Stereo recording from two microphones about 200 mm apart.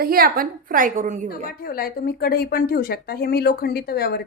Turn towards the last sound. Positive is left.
turn(degrees=50)  # may be behind; listen again after turning